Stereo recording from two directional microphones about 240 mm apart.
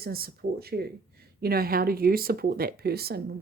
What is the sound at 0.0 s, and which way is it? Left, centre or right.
Speech, right.